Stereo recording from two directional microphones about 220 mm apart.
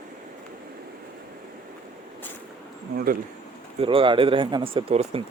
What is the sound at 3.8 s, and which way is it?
Speech, 25° right (ahead or behind).